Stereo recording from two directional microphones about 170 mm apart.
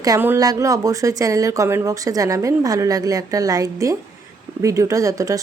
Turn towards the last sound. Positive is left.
turn(degrees=-20)  # may be behind; listen again after turning